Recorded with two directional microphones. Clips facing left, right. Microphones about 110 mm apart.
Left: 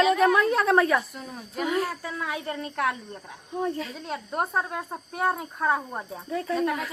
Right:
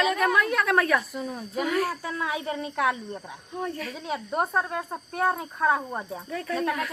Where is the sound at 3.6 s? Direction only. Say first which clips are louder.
Left 3 dB; 20° left (ahead or behind).